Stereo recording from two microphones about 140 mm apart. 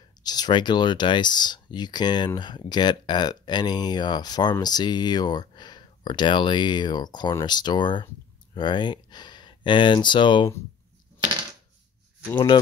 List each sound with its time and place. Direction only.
0.2 s speech: 30° left (ahead or behind)